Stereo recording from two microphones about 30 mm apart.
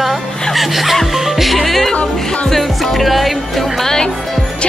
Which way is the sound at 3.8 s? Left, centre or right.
Centre.